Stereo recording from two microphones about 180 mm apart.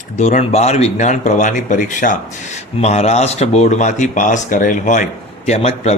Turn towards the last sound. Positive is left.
turn(degrees=35)  # may be behind; listen again after turning